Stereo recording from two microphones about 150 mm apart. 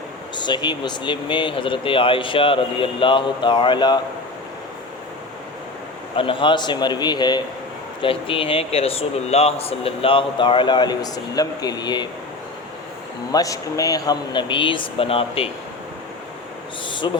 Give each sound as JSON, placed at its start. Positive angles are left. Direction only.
{"t": 0.3, "sound": "speech", "side_deg": 30}
{"t": 6.1, "sound": "a man's voice", "side_deg": 35}
{"t": 13.3, "sound": "speech", "side_deg": 25}
{"t": 17.0, "sound": "a man's voice", "side_deg": 30}